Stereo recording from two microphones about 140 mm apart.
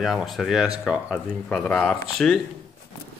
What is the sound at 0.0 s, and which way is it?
Speech, centre (ahead or behind).